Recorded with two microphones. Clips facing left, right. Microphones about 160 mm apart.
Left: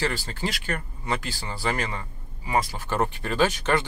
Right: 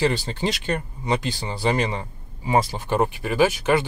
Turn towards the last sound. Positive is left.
turn(degrees=-10)  # may be behind; listen again after turning